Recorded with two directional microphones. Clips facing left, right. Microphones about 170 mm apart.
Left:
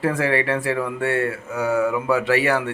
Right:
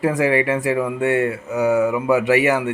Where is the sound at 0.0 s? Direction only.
15° right (ahead or behind).